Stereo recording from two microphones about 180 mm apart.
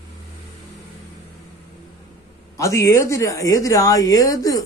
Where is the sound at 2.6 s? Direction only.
15° left (ahead or behind).